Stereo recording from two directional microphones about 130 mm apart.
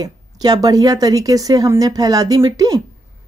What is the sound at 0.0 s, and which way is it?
A woman's voice, 30° right (ahead or behind).